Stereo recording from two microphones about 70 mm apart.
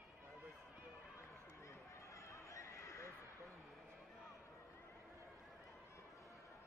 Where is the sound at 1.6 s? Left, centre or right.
Left.